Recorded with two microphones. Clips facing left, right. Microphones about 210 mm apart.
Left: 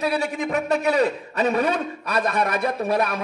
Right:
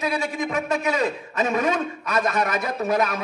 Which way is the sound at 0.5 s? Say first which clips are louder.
Left 5 dB; 35° left (ahead or behind).